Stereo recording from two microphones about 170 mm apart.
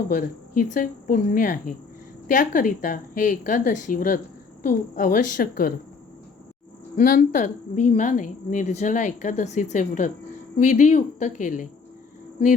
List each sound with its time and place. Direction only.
0.1 s a woman's voice: 50° left (ahead or behind)
6.9 s a woman's voice: 50° left (ahead or behind)